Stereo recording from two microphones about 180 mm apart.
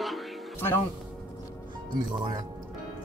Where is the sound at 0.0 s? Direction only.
Centre (ahead or behind).